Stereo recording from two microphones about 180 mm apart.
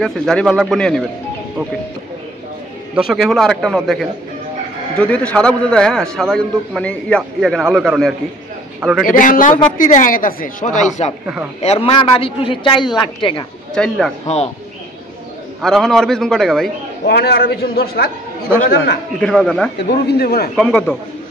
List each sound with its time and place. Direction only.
0.0 s a man's voice: 5° left (ahead or behind)
3.1 s a man's voice: centre (ahead or behind)
9.0 s a woman's voice: 50° left (ahead or behind); by 13.5 s 25° left (ahead or behind)
13.7 s a man's voice: 5° left (ahead or behind)
14.2 s a man's voice: 35° left (ahead or behind)
15.6 s a man's voice: centre (ahead or behind)
17.1 s a man's voice: 60° left (ahead or behind)
19.1 s a man's voice: 5° left (ahead or behind)
19.9 s a man's voice: 65° left (ahead or behind)
20.5 s a man's voice: centre (ahead or behind)